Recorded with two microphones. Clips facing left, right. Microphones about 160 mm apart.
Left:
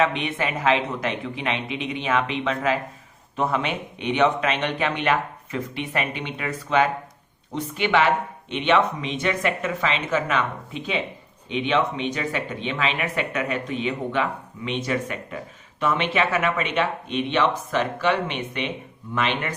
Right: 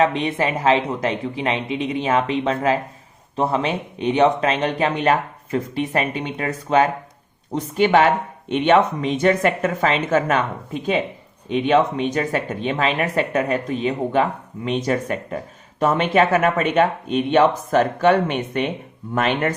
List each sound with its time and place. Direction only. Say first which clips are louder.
0.0 s speech: right 4 dB; 35° right (ahead or behind)